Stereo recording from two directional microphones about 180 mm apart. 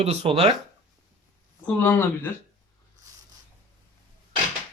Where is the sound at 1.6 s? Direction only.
10° left (ahead or behind).